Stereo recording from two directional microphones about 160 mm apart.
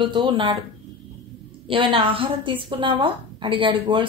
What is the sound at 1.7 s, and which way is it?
A woman's voice, 35° right (ahead or behind).